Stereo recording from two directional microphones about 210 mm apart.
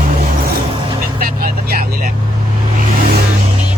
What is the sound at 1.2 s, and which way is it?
Speech, 45° right (ahead or behind).